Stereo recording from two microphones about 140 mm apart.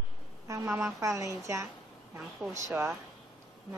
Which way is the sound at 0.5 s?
20° right (ahead or behind).